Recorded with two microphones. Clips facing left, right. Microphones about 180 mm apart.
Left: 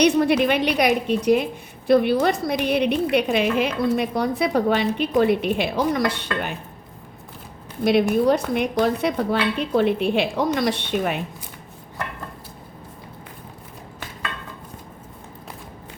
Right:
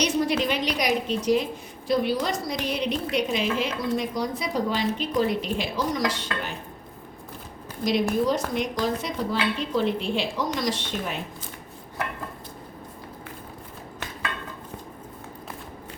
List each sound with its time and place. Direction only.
0.0 s a woman's voice: 60° left (ahead or behind)
8.3 s a woman's voice: 60° left (ahead or behind)